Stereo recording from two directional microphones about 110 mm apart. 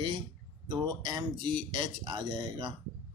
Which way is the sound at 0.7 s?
40° right (ahead or behind).